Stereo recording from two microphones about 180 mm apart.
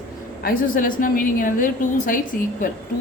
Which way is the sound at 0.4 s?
50° left (ahead or behind).